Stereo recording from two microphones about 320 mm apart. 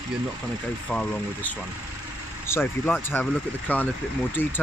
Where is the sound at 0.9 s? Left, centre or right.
Centre.